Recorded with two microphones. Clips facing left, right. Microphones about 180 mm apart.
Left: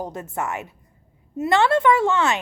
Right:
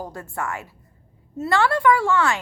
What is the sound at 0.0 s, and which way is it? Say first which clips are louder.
A woman's voice: left 2 dB; 20° left (ahead or behind).